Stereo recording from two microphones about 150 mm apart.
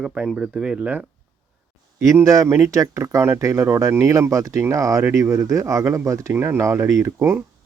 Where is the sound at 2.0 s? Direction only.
20° right (ahead or behind).